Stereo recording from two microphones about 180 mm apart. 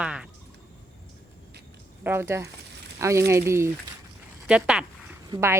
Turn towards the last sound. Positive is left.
turn(degrees=-15)  # may be behind; listen again after turning